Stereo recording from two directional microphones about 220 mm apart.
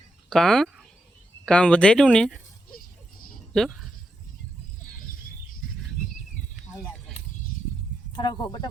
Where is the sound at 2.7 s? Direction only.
40° left (ahead or behind).